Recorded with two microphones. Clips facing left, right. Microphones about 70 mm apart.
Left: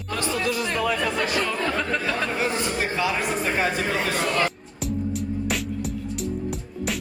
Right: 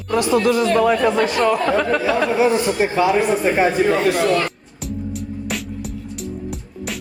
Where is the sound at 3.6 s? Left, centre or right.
Centre.